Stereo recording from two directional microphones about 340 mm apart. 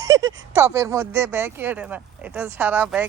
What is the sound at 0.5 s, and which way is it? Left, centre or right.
Speech, centre.